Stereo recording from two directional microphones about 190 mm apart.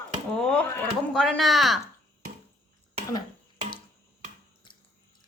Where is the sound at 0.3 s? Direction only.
5° left (ahead or behind).